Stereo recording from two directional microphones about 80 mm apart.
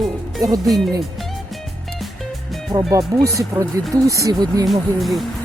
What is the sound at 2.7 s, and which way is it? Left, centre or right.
Speech, right.